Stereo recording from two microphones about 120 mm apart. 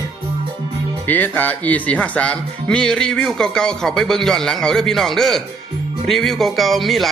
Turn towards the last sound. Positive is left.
turn(degrees=0)  # may be behind; listen again after turning